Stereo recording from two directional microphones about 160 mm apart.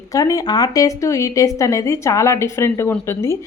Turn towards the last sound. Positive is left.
turn(degrees=15)  # may be behind; listen again after turning